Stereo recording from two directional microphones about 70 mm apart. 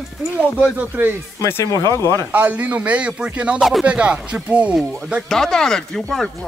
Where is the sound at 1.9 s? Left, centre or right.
Left.